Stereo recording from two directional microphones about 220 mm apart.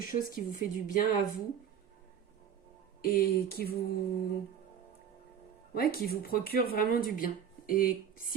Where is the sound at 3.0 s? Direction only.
40° left (ahead or behind).